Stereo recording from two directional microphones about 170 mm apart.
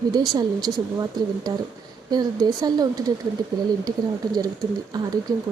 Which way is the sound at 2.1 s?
25° right (ahead or behind).